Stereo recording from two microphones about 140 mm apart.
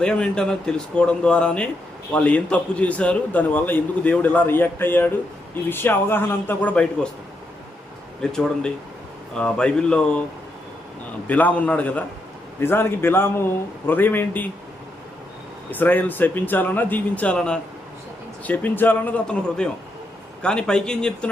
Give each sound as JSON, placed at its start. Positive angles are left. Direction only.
{"t": 0.0, "sound": "a man's voice", "side_deg": 5}
{"t": 8.2, "sound": "a man's voice", "side_deg": 5}
{"t": 11.3, "sound": "a man's voice", "side_deg": 10}
{"t": 15.7, "sound": "a man's voice", "side_deg": 15}